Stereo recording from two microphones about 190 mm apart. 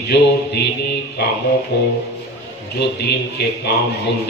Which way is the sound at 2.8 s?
60° left (ahead or behind).